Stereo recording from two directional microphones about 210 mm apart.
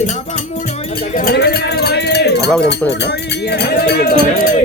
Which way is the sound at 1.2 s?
45° left (ahead or behind).